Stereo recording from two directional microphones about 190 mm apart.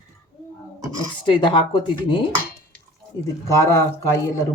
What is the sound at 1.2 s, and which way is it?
Speech, 25° left (ahead or behind).